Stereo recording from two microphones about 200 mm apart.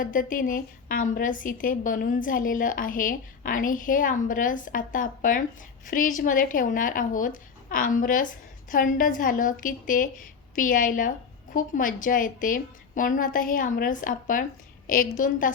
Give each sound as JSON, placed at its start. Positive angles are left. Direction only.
{"t": 0.0, "sound": "a woman's voice", "side_deg": 40}